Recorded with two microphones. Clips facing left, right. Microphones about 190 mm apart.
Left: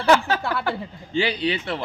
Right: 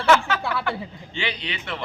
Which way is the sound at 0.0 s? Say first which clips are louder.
Left 1 dB; 35° left (ahead or behind).